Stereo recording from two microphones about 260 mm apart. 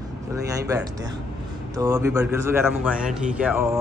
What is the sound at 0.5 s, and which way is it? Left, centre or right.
Speech, centre.